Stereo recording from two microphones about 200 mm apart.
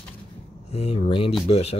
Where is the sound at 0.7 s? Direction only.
30° left (ahead or behind).